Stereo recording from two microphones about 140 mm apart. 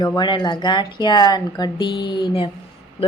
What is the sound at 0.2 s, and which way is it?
Speech, 30° left (ahead or behind).